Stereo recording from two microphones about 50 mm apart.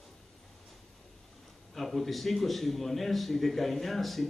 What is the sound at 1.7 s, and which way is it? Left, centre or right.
A man's voice, centre.